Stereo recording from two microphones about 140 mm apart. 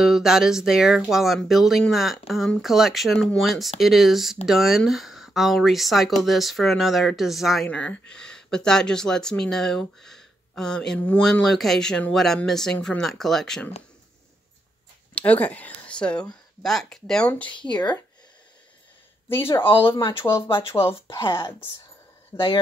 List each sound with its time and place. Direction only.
0.0 s speech: centre (ahead or behind)
7.6 s speech: 10° left (ahead or behind)
15.1 s speech: 10° left (ahead or behind)
19.2 s speech: 15° left (ahead or behind)
20.3 s speech: 40° left (ahead or behind)
22.3 s speech: 20° left (ahead or behind)